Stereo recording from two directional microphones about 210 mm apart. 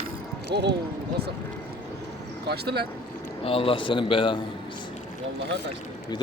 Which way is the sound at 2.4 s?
50° right (ahead or behind).